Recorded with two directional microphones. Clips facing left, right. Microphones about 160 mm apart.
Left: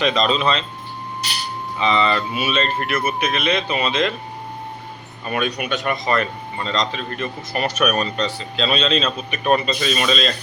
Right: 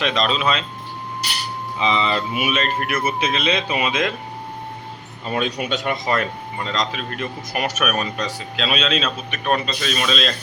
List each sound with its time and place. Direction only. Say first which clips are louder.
0.0 s speech: left 2 dB; centre (ahead or behind)
1.8 s speech: left 2 dB; 15° right (ahead or behind)
5.2 s speech: even; 20° right (ahead or behind)
6.7 s speech: left 2 dB; 5° right (ahead or behind)